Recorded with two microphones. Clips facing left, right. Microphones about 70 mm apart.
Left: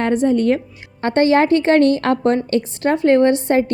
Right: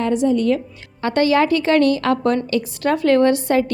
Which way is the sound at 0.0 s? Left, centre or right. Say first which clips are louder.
Left 1 dB; left.